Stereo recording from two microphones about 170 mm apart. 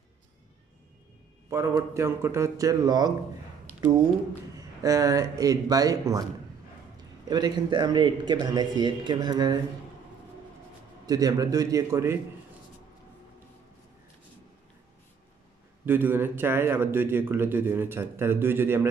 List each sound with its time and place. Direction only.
1.5 s speech: 15° right (ahead or behind)
4.6 s speech: 20° right (ahead or behind)
7.2 s speech: 25° right (ahead or behind)
11.1 s speech: 20° right (ahead or behind)
15.8 s a man's voice: 10° right (ahead or behind)